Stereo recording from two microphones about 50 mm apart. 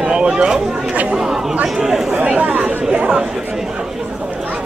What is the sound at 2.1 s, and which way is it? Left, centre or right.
Chatter, right.